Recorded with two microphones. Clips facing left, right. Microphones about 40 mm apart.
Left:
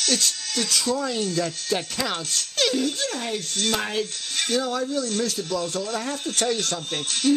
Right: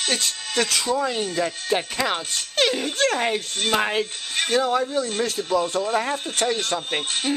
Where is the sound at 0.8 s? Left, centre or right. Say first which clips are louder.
Right 2 dB; right.